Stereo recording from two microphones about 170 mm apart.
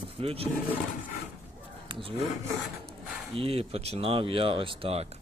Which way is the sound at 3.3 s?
35° right (ahead or behind).